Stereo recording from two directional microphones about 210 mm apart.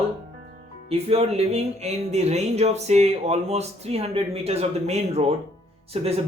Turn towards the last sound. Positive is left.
turn(degrees=-30)  # may be behind; listen again after turning